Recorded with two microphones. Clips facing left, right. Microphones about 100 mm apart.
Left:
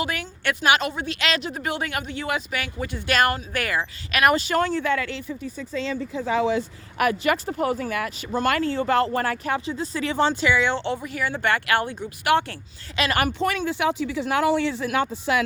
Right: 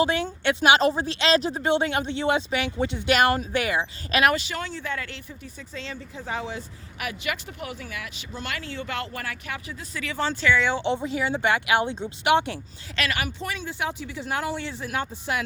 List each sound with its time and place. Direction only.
0.0 s speech: 25° right (ahead or behind)
0.8 s speech: 35° right (ahead or behind)
4.4 s speech: 50° left (ahead or behind)
4.8 s speech: 80° left
6.4 s speech: 90° left
7.0 s speech: 45° left (ahead or behind); by 10.5 s 25° left (ahead or behind)
10.6 s speech: 5° right (ahead or behind)
10.8 s speech: 20° right (ahead or behind)
13.1 s speech: 50° left (ahead or behind)
13.4 s speech: 65° left (ahead or behind); by 15.4 s 90° left